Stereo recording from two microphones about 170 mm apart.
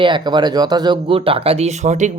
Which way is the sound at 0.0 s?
25° right (ahead or behind).